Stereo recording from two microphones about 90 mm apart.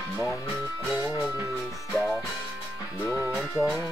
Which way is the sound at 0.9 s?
10° right (ahead or behind).